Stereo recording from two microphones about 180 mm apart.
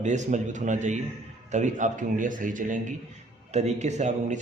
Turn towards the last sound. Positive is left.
turn(degrees=-40)  # may be behind; listen again after turning